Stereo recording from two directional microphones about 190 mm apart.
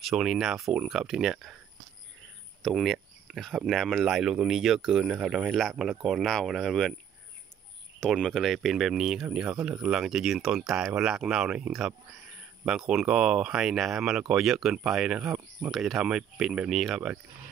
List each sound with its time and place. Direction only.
0.0 s speech: 5° right (ahead or behind)
2.6 s speech: centre (ahead or behind)
8.0 s speech: centre (ahead or behind)